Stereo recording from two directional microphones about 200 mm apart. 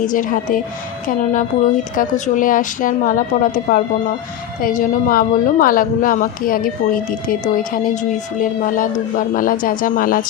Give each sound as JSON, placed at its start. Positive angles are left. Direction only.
{"t": 0.0, "sound": "a woman's voice", "side_deg": 40}